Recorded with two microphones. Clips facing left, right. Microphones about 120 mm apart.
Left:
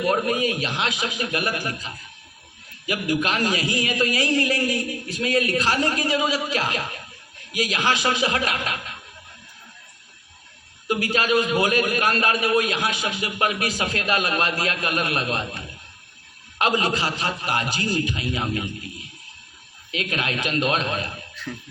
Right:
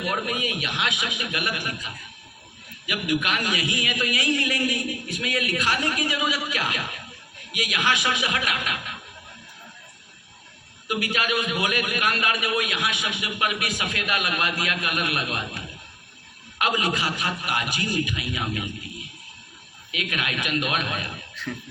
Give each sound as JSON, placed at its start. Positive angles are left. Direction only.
{"t": 0.0, "sound": "a man's voice", "side_deg": 35}
{"t": 10.8, "sound": "a man's voice", "side_deg": 30}
{"t": 19.9, "sound": "a man's voice", "side_deg": 30}